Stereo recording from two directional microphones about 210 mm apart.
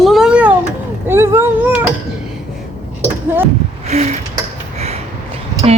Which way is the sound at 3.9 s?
30° right (ahead or behind).